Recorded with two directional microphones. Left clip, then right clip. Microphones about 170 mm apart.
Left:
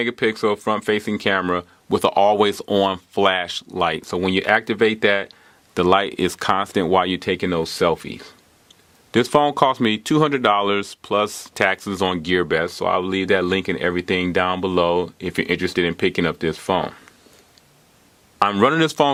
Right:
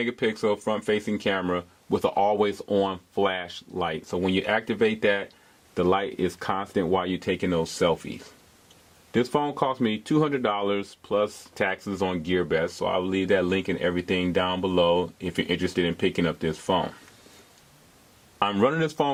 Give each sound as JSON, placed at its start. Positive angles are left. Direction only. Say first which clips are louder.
{"t": 0.0, "sound": "speech", "louder": "left 6 dB", "side_deg": 25}
{"t": 4.0, "sound": "speech", "louder": "left 6 dB", "side_deg": 25}
{"t": 9.3, "sound": "speech", "louder": "left 12 dB", "side_deg": 30}
{"t": 18.3, "sound": "speech", "louder": "left 7 dB", "side_deg": 25}